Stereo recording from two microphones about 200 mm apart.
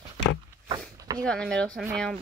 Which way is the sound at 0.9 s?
20° right (ahead or behind).